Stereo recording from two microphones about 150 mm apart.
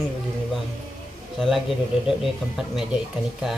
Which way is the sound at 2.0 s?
Centre (ahead or behind).